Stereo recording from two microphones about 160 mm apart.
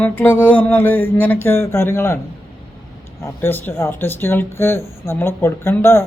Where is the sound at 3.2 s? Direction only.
15° left (ahead or behind).